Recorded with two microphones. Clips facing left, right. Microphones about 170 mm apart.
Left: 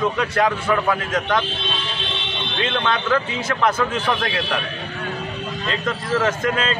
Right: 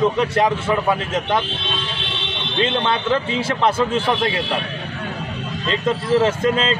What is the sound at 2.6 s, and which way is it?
A man's voice, 25° right (ahead or behind).